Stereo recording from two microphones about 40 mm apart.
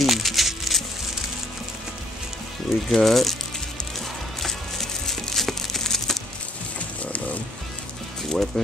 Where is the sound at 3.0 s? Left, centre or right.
Centre.